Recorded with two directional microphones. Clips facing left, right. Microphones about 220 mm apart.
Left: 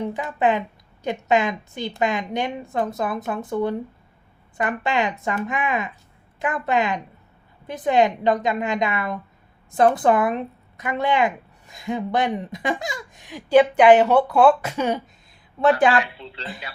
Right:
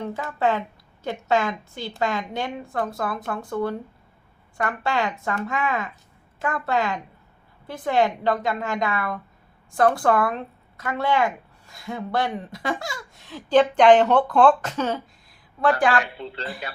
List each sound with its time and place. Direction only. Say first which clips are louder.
0.0 s a woman's voice: left 2 dB; 20° left (ahead or behind)
16.1 s speech: right 4 dB; 50° right (ahead or behind)